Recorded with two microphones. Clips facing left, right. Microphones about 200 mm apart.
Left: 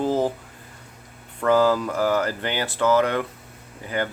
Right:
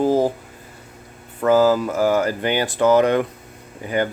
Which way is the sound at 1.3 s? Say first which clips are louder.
Right 3 dB; 5° right (ahead or behind).